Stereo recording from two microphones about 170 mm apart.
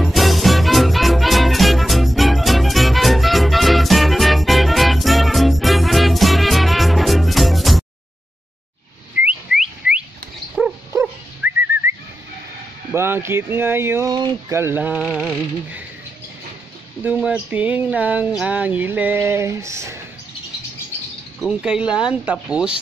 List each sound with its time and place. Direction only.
0.0 s music: centre (ahead or behind)
9.2 s whistling: 5° right (ahead or behind)
10.6 s dog: centre (ahead or behind)
11.4 s bird: 10° right (ahead or behind)
12.9 s speech: 15° right (ahead or behind)
14.1 s speech: 25° right (ahead or behind)
14.6 s speech: 10° right (ahead or behind)
15.0 s speech: centre (ahead or behind)
17.0 s speech: 5° right (ahead or behind)
21.4 s speech: 5° right (ahead or behind)